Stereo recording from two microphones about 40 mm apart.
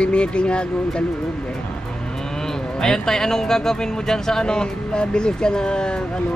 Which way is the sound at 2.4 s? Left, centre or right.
Centre.